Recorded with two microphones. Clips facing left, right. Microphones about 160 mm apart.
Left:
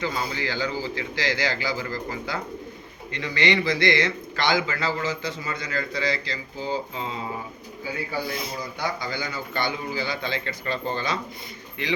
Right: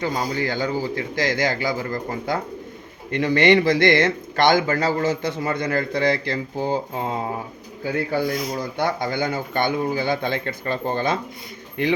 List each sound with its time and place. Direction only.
0.0 s a man's voice: 40° right (ahead or behind)